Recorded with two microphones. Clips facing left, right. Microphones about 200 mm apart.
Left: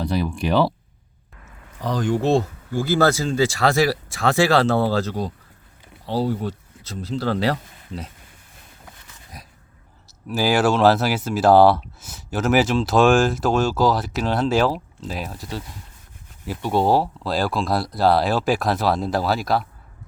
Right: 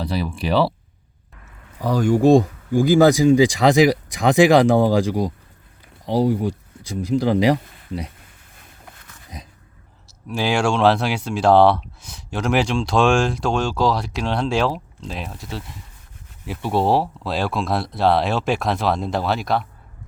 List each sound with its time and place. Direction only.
0.1 s speech: centre (ahead or behind)
1.8 s speech: 10° right (ahead or behind)
9.3 s dog: 20° right (ahead or behind)
10.2 s speech: 5° left (ahead or behind)